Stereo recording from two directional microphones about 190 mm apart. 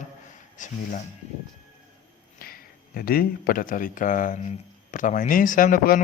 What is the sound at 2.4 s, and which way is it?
Speech, 50° left (ahead or behind).